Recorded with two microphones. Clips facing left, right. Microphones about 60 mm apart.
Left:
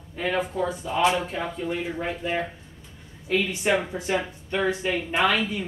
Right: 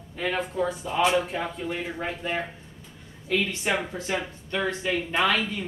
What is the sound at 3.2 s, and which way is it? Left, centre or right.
Speech, centre.